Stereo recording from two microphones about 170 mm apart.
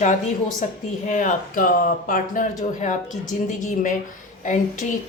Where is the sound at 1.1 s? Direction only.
45° left (ahead or behind).